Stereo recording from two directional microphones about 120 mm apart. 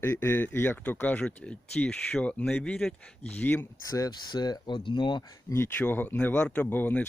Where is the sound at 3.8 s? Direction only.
30° left (ahead or behind).